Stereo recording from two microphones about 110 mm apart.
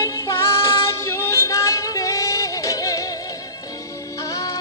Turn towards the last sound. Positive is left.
turn(degrees=30)  # may be behind; listen again after turning